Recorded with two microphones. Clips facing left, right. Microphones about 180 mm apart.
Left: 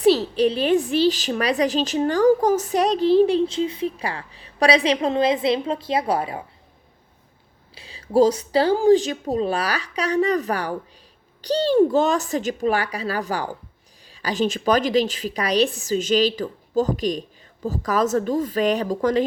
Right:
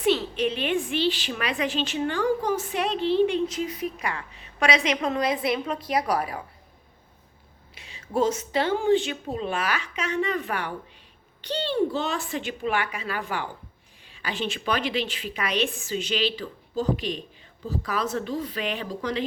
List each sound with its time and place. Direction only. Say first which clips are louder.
0.0 s a woman's voice: left 6 dB; 35° left (ahead or behind)
7.8 s a woman's voice: left 8 dB; 35° left (ahead or behind)